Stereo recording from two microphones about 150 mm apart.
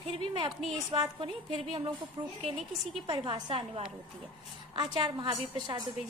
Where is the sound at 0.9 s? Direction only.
35° right (ahead or behind).